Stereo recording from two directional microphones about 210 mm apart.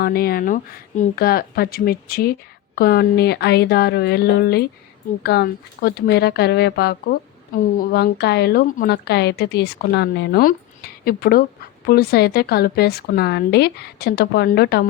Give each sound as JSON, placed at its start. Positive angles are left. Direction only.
{"t": 0.0, "sound": "speech", "side_deg": 45}